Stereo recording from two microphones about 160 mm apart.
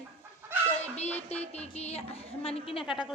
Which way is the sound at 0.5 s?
15° right (ahead or behind).